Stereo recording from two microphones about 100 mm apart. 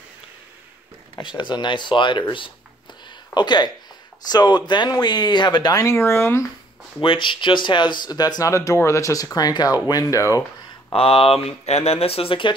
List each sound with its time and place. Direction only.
1.1 s speech: 50° left (ahead or behind)
5.8 s speech: 30° left (ahead or behind)
7.0 s speech: 55° left (ahead or behind); by 10.4 s 35° left (ahead or behind)
10.9 s speech: 70° left (ahead or behind)